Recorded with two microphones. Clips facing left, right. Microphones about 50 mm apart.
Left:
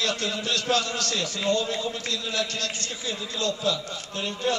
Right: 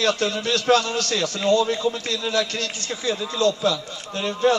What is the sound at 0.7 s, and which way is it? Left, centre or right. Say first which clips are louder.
Speech: right 7 dB; right.